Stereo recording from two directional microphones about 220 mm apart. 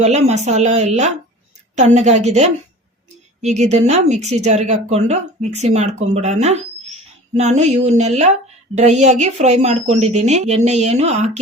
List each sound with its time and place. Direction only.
0.0 s a woman's voice: 30° right (ahead or behind)